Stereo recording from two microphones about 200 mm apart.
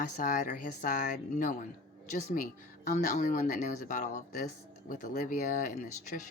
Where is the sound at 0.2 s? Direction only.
40° left (ahead or behind).